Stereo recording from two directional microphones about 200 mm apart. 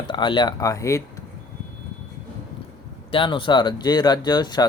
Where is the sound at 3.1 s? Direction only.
25° left (ahead or behind).